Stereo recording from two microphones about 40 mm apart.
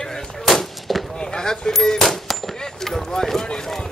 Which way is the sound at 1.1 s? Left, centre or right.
Left.